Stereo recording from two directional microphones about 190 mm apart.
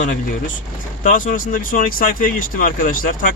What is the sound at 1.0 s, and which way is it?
Speech, 45° left (ahead or behind).